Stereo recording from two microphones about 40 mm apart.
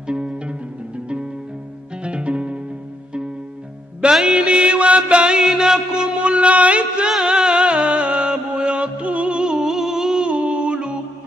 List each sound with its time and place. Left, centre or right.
0.0 s music: right
4.3 s mantra: right
7.2 s music: right